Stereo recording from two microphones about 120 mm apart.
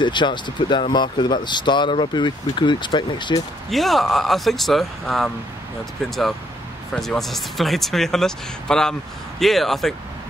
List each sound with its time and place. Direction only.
0.0 s speech: 40° left (ahead or behind)
3.7 s speech: centre (ahead or behind)